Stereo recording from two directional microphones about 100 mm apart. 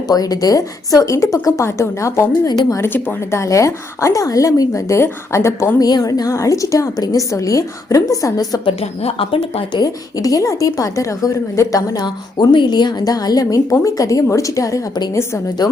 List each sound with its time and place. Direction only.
0.1 s speech: 40° left (ahead or behind)
2.8 s speech: 20° left (ahead or behind)
5.9 s speech: 40° left (ahead or behind)
8.6 s a woman's voice: 80° left
9.7 s speech: 40° left (ahead or behind)